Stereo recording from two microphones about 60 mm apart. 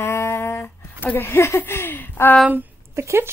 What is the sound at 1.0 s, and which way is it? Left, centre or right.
Speech, left.